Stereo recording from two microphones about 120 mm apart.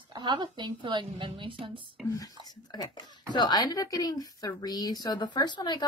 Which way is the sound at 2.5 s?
35° left (ahead or behind).